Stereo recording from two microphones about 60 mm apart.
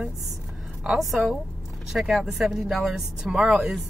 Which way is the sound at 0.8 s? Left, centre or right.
Centre.